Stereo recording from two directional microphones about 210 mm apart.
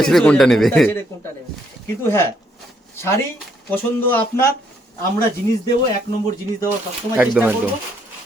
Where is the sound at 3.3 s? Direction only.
10° left (ahead or behind).